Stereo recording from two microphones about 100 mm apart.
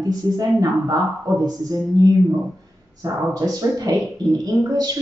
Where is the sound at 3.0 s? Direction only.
35° right (ahead or behind).